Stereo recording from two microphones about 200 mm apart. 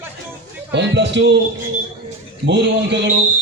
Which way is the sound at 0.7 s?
60° right (ahead or behind).